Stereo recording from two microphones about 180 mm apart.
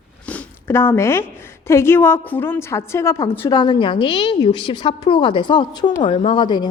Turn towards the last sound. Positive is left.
turn(degrees=25)  # may be behind; listen again after turning